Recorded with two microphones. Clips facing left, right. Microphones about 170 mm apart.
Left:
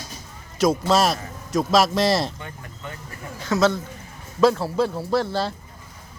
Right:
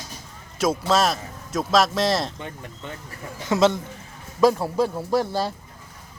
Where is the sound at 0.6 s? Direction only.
Centre (ahead or behind).